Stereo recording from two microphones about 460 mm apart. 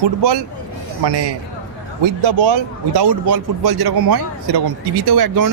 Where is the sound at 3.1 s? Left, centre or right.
Right.